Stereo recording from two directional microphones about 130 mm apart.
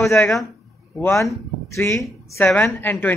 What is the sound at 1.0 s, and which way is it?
Speech, 25° left (ahead or behind).